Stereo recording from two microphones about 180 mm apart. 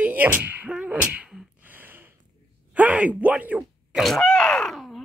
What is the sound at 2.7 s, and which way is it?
Speech, 10° right (ahead or behind).